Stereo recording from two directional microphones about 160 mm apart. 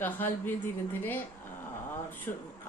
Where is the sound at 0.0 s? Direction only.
10° left (ahead or behind).